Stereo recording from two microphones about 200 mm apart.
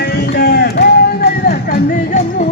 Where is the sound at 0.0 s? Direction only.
55° left (ahead or behind).